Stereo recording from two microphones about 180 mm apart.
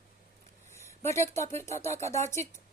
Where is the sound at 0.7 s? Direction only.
15° left (ahead or behind).